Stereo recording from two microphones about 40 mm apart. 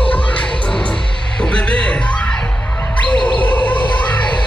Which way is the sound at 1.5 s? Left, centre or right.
Left.